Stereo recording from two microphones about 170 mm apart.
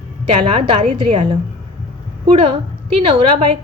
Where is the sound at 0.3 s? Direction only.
30° right (ahead or behind).